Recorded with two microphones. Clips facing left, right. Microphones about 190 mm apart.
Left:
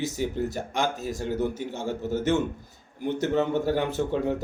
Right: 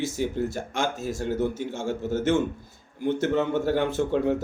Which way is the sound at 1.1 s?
15° left (ahead or behind).